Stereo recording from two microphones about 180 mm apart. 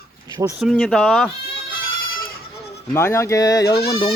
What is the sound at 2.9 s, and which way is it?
Speech, 15° left (ahead or behind).